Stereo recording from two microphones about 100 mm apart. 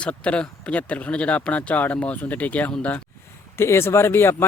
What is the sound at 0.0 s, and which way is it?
Speech, 10° left (ahead or behind).